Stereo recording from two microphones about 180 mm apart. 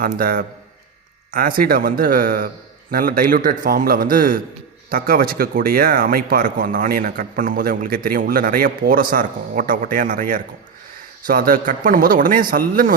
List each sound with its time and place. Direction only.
0.0 s a man's voice: 55° right (ahead or behind)